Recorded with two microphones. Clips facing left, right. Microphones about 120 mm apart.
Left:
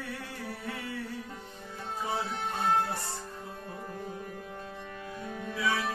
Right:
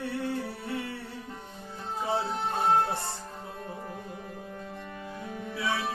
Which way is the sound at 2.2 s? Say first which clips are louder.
Right 3 dB; 25° right (ahead or behind).